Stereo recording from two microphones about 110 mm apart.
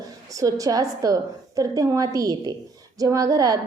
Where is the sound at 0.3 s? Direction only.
30° right (ahead or behind).